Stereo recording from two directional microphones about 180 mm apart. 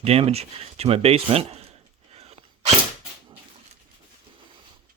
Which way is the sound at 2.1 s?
35° right (ahead or behind).